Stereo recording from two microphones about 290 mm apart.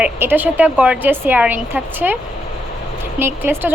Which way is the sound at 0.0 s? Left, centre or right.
Centre.